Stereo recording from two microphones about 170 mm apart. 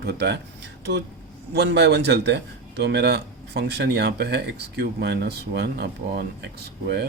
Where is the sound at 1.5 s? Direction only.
80° right.